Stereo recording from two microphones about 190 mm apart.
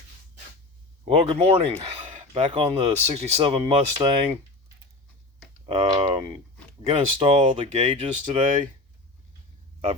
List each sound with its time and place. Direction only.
1.0 s speech: 30° right (ahead or behind)
5.6 s speech: 25° right (ahead or behind)